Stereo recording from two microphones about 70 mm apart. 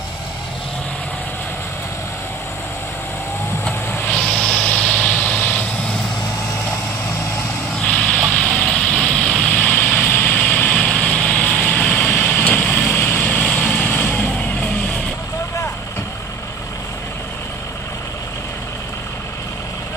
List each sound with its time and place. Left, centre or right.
4.3 s vehicle: centre
7.8 s vehicle: centre